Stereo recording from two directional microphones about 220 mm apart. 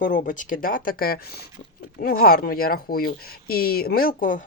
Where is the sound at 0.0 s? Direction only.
35° left (ahead or behind).